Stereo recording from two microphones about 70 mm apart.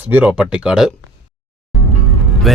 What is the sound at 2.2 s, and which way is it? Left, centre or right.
Music, centre.